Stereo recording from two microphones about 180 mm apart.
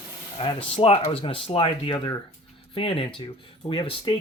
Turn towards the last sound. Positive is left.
turn(degrees=30)  # may be behind; listen again after turning